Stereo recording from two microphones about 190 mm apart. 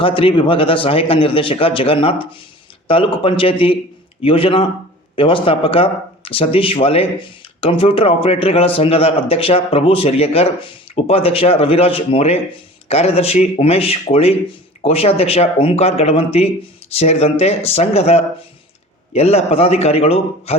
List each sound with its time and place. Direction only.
0.0 s a man's voice: 30° left (ahead or behind)